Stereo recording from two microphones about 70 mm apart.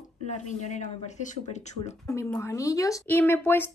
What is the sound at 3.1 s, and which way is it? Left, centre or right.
Speech, left.